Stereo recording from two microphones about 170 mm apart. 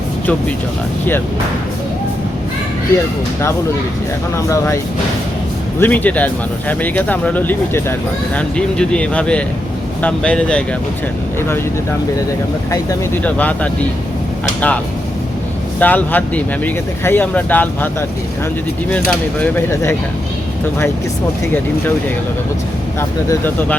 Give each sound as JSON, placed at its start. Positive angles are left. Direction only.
{"t": 4.4, "sound": "speech", "side_deg": 15}
{"t": 5.8, "sound": "speech", "side_deg": 10}
{"t": 13.2, "sound": "speech", "side_deg": 10}
{"t": 15.8, "sound": "speech", "side_deg": 10}
{"t": 18.9, "sound": "speech", "side_deg": 10}
{"t": 23.0, "sound": "speech", "side_deg": 15}